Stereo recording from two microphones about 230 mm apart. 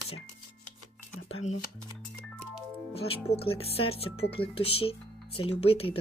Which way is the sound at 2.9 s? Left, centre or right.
Left.